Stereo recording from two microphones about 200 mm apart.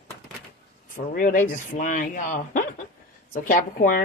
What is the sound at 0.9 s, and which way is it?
Speech, 45° left (ahead or behind).